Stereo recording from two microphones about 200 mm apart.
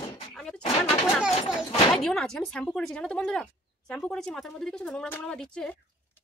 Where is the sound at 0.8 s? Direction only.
Centre (ahead or behind).